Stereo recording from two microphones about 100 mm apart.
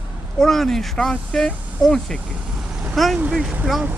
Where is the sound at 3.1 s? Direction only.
10° right (ahead or behind).